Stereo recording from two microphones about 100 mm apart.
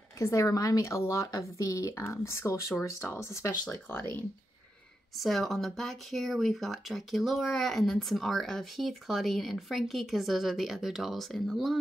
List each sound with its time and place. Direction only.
0.2 s a woman's voice: 30° left (ahead or behind)
5.1 s speech: centre (ahead or behind)